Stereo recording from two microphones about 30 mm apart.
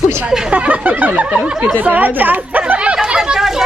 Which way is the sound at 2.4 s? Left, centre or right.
Right.